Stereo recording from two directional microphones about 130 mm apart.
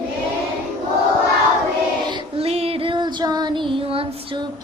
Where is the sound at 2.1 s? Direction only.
35° right (ahead or behind).